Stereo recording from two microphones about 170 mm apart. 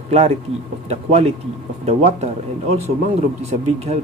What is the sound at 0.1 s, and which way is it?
Speech, 40° right (ahead or behind).